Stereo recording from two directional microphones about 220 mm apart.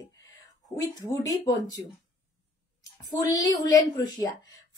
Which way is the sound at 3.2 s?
15° left (ahead or behind).